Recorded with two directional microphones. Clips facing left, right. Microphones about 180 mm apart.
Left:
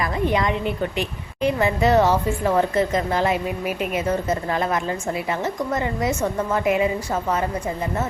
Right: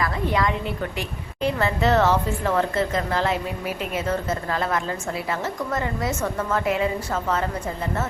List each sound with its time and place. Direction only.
0.0 s a woman's voice: 20° left (ahead or behind)